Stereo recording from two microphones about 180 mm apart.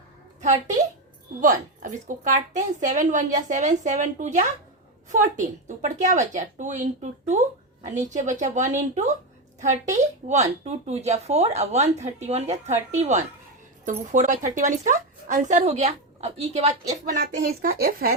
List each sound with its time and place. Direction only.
1.4 s a woman's voice: 45° right (ahead or behind)
17.6 s speech: 50° right (ahead or behind)